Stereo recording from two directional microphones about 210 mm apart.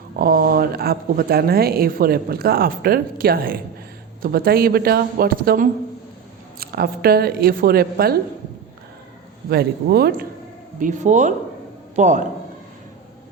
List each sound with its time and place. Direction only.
0.2 s speech: 45° right (ahead or behind)
9.5 s speech: 50° right (ahead or behind)
10.8 s speech: 35° right (ahead or behind)